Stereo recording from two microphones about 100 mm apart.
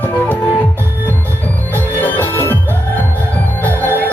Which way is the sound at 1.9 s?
20° left (ahead or behind).